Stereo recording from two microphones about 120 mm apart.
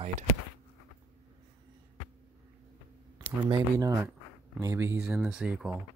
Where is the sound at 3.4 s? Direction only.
40° right (ahead or behind).